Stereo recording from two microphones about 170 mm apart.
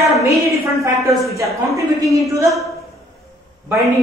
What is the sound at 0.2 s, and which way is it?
A woman's voice, 15° right (ahead or behind).